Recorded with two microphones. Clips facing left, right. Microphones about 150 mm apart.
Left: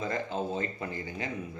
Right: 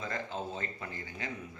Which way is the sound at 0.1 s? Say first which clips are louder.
Left 6 dB; 15° left (ahead or behind).